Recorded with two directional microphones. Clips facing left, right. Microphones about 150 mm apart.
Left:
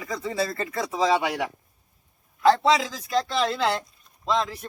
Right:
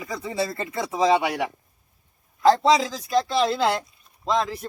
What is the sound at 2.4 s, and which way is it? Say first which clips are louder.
Speech: right 2 dB; 35° right (ahead or behind).